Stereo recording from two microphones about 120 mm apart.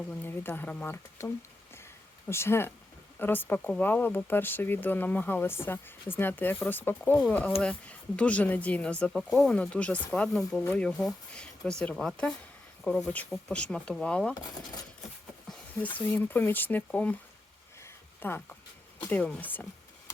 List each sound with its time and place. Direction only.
0.1 s speech: 15° left (ahead or behind)
16.0 s speech: 15° left (ahead or behind)
17.7 s a sound: 20° left (ahead or behind)
19.0 s speech: 10° left (ahead or behind)